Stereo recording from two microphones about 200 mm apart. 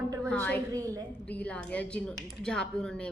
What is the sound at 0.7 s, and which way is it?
Speech, 15° right (ahead or behind).